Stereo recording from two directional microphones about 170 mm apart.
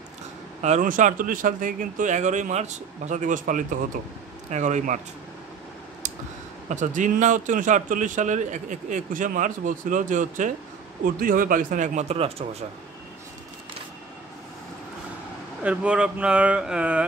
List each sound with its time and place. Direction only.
0.6 s a man's voice: 45° right (ahead or behind)
6.7 s a man's voice: 45° right (ahead or behind)
15.6 s speech: 5° right (ahead or behind)